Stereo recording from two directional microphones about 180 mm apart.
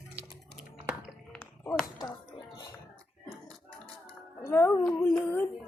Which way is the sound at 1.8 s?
20° left (ahead or behind).